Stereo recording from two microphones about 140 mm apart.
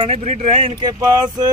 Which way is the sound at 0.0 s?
50° right (ahead or behind).